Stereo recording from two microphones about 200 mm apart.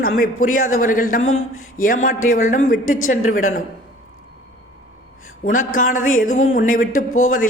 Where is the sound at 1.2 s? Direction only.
80° left.